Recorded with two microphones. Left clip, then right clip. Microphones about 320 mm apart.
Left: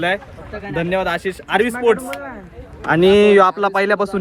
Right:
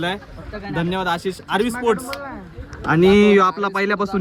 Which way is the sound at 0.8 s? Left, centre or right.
Centre.